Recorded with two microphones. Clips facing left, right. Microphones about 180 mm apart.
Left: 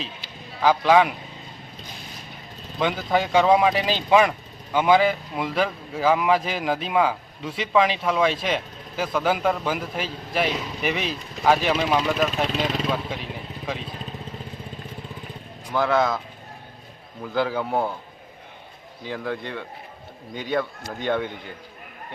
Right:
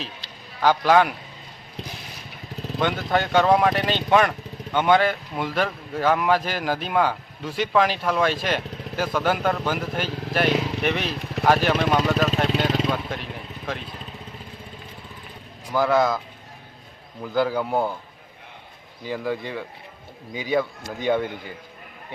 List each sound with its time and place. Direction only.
0.6 s speech: centre (ahead or behind)
2.7 s speech: 5° left (ahead or behind)
10.1 s speech: 75° right (ahead or behind)
10.8 s speech: centre (ahead or behind)
11.1 s speech: 65° right (ahead or behind)
11.4 s speech: centre (ahead or behind)
15.7 s speech: 5° right (ahead or behind)
17.2 s speech: centre (ahead or behind)
19.0 s speech: 5° right (ahead or behind)